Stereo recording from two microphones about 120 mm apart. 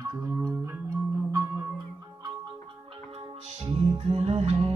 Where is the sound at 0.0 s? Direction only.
25° right (ahead or behind).